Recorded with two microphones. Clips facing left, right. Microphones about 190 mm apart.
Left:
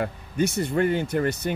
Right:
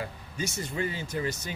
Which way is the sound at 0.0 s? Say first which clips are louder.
Left 10 dB; 60° left (ahead or behind).